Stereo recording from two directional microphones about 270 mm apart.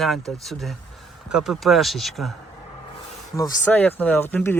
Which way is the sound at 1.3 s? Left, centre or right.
Centre.